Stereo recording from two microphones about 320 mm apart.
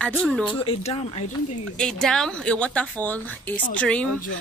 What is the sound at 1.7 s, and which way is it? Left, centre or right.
Speech, centre.